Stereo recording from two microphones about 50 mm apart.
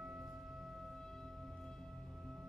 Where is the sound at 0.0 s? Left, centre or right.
Centre.